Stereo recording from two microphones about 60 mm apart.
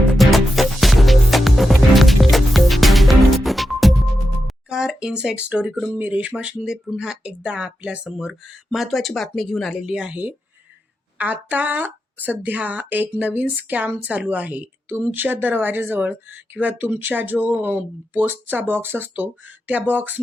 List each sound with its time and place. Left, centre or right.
0.2 s music: centre
4.7 s speech: centre
8.3 s speech: centre
9.7 s speech: centre
11.2 s a woman's voice: right